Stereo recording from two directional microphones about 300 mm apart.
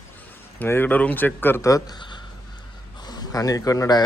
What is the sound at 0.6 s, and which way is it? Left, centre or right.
A man's voice, centre.